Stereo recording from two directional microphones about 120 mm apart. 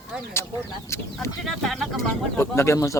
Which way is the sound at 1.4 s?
Centre (ahead or behind).